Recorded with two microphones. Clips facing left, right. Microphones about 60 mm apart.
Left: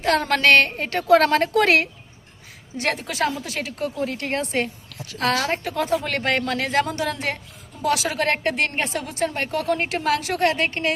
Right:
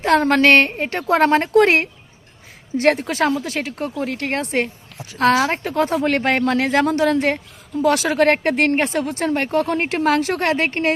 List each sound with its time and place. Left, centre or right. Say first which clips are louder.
0.0 s a woman's voice: right 5 dB; right
2.7 s a woman's voice: right 8 dB; right
5.6 s a woman's voice: right 5 dB; right